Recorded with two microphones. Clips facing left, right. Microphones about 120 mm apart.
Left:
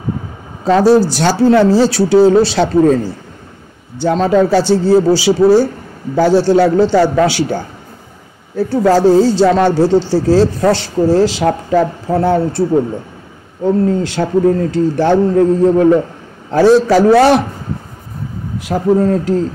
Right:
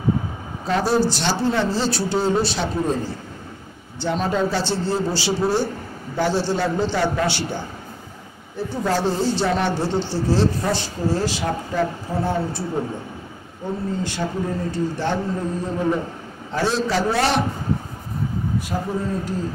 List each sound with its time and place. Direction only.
1.1 s speech: 90° left
4.2 s speech: 90° left
13.7 s speech: 85° left
18.6 s speech: 80° left